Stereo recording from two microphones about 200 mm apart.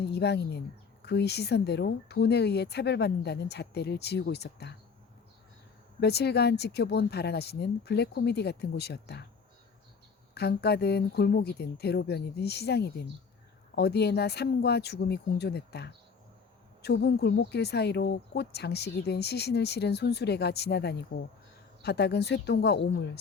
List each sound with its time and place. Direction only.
0.0 s speech: 55° left (ahead or behind)
6.0 s speech: 55° left (ahead or behind)
10.3 s speech: 55° left (ahead or behind)